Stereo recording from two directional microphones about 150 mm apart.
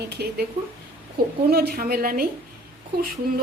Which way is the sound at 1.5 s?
90° right.